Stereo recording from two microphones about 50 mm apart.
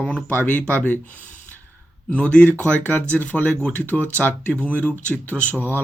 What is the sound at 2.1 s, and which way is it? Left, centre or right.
Speech, left.